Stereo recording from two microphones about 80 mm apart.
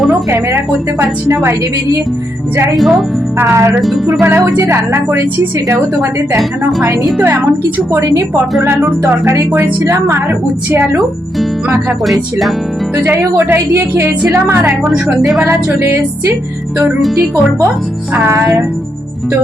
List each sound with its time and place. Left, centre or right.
0.3 s music: right
2.7 s speech: centre
3.3 s music: right
3.8 s speech: centre
4.2 s music: right
6.8 s a woman's voice: right
7.9 s music: right
9.8 s music: right
12.0 s speech: centre
13.0 s speech: right
14.3 s music: right
15.4 s speech: right
18.3 s music: right